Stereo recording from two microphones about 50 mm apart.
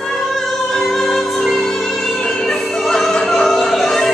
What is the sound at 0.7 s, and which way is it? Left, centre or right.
Music, centre.